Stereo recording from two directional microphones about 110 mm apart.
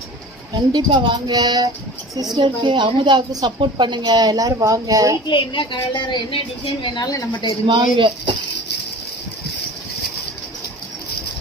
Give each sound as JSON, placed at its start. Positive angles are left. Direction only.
{"t": 0.7, "sound": "a woman's voice", "side_deg": -45}
{"t": 5.2, "sound": "a child's voice", "side_deg": 50}
{"t": 7.7, "sound": "speech", "side_deg": -45}